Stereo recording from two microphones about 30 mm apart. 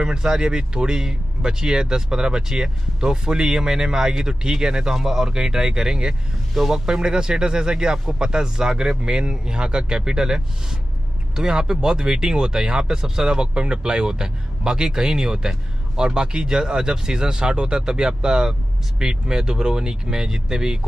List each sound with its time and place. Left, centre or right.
0.0 s speech: right